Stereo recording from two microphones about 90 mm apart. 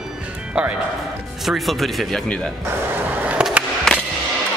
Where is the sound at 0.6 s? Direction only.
15° right (ahead or behind).